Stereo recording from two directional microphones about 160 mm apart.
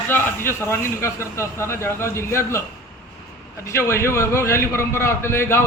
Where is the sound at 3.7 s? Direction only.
15° left (ahead or behind).